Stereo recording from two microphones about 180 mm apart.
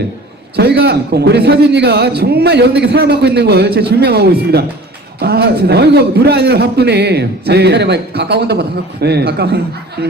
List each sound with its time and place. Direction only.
0.5 s a man's voice: 65° right (ahead or behind)